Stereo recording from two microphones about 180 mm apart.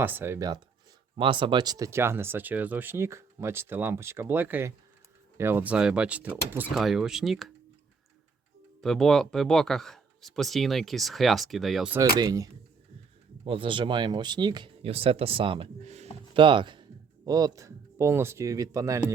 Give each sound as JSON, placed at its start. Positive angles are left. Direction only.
{"t": 0.0, "sound": "speech", "side_deg": -10}
{"t": 6.7, "sound": "speech", "side_deg": 0}
{"t": 8.8, "sound": "speech", "side_deg": 0}
{"t": 11.9, "sound": "speech", "side_deg": -20}
{"t": 16.3, "sound": "speech", "side_deg": -25}